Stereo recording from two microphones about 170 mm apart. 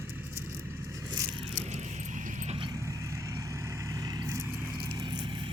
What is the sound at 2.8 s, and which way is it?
Vehicle, 15° right (ahead or behind).